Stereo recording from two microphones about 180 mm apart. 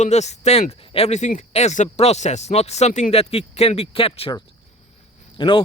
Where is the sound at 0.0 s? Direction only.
40° left (ahead or behind).